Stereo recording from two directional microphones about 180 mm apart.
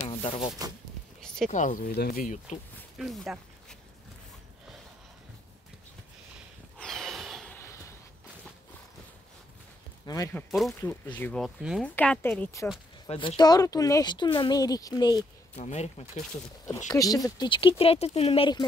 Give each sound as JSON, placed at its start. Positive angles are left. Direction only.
{"t": 0.0, "sound": "a sound", "side_deg": 30}
{"t": 1.2, "sound": "a sound", "side_deg": 5}
{"t": 1.5, "sound": "speech", "side_deg": 45}
{"t": 3.0, "sound": "speech", "side_deg": 0}
{"t": 6.8, "sound": "a sound", "side_deg": 0}
{"t": 10.0, "sound": "speech", "side_deg": 20}
{"t": 11.4, "sound": "speech", "side_deg": 0}
{"t": 11.8, "sound": "speech", "side_deg": 10}
{"t": 13.0, "sound": "speech", "side_deg": 30}
{"t": 13.4, "sound": "speech", "side_deg": 20}
{"t": 15.5, "sound": "speech", "side_deg": 40}
{"t": 16.9, "sound": "speech", "side_deg": 20}